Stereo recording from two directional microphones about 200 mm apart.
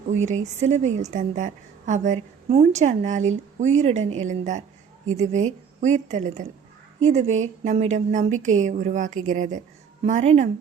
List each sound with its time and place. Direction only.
0.1 s a woman's voice: 35° right (ahead or behind)